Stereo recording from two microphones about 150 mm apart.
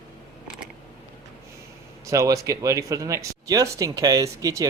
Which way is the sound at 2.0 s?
20° right (ahead or behind).